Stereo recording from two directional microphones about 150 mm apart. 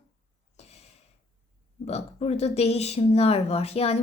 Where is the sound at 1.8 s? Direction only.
45° left (ahead or behind).